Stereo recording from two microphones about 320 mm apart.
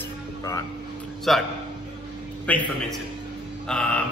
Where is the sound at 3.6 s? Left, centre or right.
Centre.